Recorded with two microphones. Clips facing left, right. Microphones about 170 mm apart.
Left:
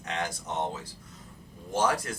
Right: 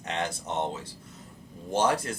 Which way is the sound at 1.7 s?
25° right (ahead or behind).